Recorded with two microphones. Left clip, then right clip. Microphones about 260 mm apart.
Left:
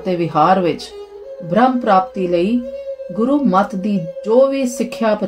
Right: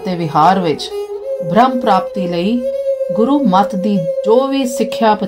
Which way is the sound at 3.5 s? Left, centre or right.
Right.